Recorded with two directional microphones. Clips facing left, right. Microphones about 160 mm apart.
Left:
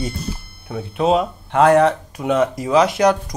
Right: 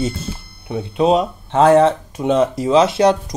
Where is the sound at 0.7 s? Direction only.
20° right (ahead or behind).